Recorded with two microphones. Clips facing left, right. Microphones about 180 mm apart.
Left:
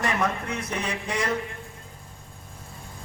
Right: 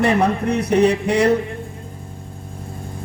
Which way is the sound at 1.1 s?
65° right (ahead or behind).